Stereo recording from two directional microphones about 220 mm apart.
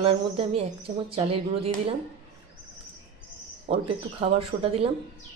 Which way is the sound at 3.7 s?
30° right (ahead or behind).